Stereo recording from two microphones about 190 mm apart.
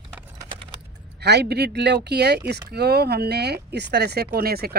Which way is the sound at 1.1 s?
60° right (ahead or behind).